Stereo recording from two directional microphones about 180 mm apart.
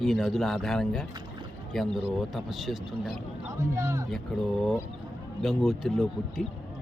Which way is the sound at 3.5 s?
15° right (ahead or behind).